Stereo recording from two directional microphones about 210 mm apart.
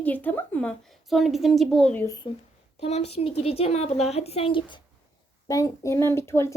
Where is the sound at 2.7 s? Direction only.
30° left (ahead or behind).